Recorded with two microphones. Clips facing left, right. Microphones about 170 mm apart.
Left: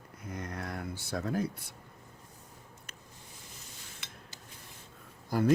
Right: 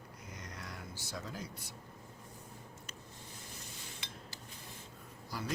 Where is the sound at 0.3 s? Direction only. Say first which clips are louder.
Left 10 dB; 55° left (ahead or behind).